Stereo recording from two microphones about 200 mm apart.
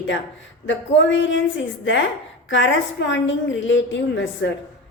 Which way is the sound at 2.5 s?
65° left (ahead or behind).